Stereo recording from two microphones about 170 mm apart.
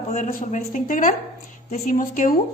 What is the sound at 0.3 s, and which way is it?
A woman's voice, 50° left (ahead or behind).